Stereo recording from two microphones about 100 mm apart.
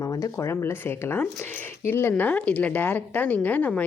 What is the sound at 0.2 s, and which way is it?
A woman's voice, 30° left (ahead or behind).